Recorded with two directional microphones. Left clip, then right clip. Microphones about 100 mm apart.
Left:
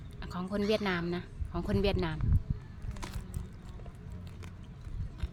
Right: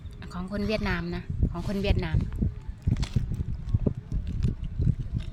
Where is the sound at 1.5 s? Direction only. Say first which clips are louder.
Even; 35° left (ahead or behind).